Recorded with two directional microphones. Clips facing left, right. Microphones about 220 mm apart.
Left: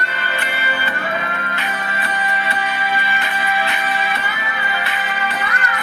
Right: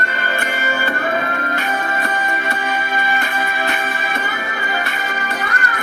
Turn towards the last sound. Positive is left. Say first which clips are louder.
# even
turn(degrees=-45)  # may be behind; listen again after turning